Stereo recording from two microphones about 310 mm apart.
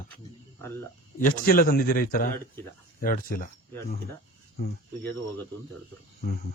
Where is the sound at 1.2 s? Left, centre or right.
Left.